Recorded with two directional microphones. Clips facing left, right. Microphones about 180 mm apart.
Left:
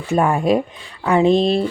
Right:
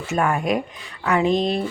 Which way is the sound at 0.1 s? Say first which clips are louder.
Left 5 dB; 30° left (ahead or behind).